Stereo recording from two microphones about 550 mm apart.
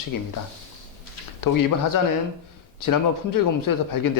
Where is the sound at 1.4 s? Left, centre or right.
Left.